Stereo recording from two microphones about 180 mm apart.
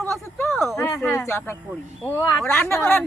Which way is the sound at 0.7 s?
15° left (ahead or behind).